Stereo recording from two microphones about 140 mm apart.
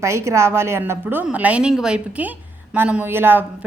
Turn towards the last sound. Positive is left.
turn(degrees=-15)  # may be behind; listen again after turning